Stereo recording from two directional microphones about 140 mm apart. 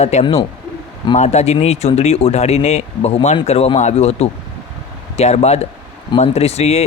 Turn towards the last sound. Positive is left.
turn(degrees=50)  # may be behind; listen again after turning